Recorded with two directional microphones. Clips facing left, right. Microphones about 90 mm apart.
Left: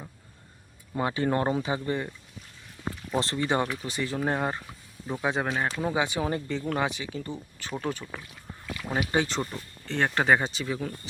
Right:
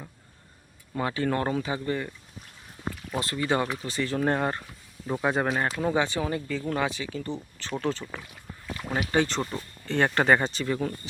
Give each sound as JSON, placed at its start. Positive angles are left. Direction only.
{"t": 0.9, "sound": "speech", "side_deg": 20}
{"t": 3.2, "sound": "speech", "side_deg": 30}
{"t": 5.8, "sound": "speech", "side_deg": 10}
{"t": 6.2, "sound": "speech", "side_deg": 25}